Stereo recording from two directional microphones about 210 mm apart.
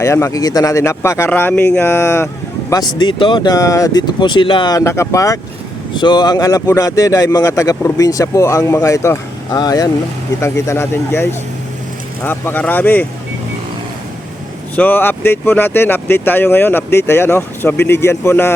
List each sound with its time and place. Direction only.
0.0 s speech: 15° left (ahead or behind)
14.8 s speech: 10° left (ahead or behind)